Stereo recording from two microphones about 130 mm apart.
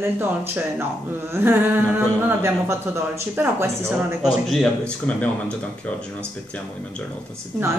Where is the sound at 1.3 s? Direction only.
15° right (ahead or behind).